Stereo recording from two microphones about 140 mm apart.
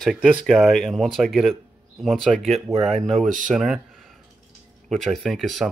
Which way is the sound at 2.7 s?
50° right (ahead or behind).